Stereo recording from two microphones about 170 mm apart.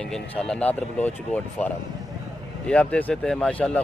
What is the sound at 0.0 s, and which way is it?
A man's voice, 5° left (ahead or behind).